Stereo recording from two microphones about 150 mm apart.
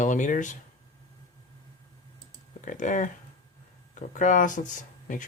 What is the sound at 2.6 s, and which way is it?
Speech, 55° left (ahead or behind).